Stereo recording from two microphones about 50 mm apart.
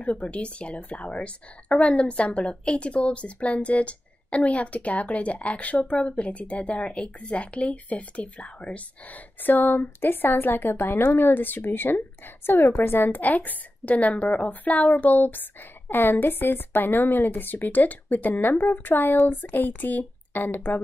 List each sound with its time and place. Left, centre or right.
0.0 s a woman's voice: left